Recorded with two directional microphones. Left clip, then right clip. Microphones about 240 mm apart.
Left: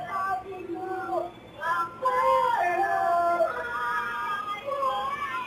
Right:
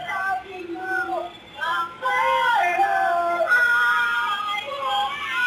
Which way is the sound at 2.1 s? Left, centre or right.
Centre.